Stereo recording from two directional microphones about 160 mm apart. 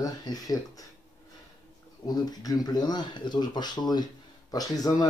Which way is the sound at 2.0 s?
25° left (ahead or behind).